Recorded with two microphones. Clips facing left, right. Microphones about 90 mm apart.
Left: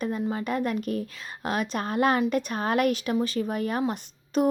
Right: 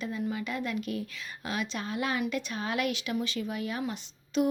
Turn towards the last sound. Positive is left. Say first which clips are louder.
# left 4 dB
turn(degrees=45)  # may be behind; listen again after turning